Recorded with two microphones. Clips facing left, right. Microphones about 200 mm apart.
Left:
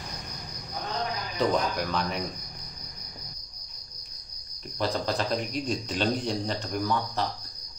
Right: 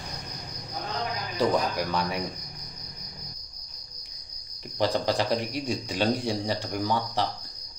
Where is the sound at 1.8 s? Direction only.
10° right (ahead or behind).